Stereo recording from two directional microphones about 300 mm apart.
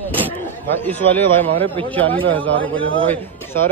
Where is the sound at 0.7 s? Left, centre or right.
Centre.